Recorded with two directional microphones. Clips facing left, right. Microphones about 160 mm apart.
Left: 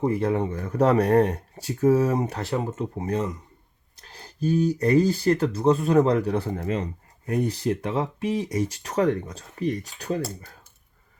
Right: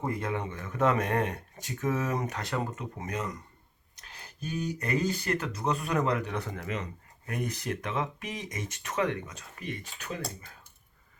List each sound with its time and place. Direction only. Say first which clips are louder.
0.1 s speech: left 9 dB; 35° left (ahead or behind)